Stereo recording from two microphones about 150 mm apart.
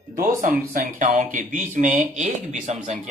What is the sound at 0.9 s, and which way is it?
Speech, 60° right (ahead or behind).